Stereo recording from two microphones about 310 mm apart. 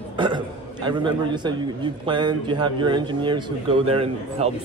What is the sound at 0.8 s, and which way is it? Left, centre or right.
A man's voice, centre.